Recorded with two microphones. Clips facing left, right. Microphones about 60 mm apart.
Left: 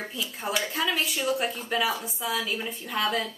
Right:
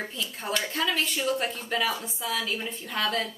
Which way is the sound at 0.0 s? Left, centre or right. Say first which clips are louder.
Left 1 dB; centre.